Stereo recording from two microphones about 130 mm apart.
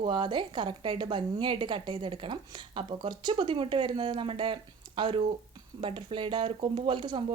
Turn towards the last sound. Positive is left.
turn(degrees=-40)  # may be behind; listen again after turning